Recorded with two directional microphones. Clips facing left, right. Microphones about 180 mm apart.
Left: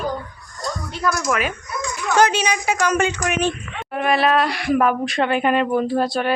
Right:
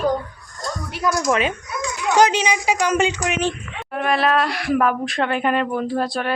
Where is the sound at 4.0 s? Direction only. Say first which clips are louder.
Left 1 dB; 5° left (ahead or behind).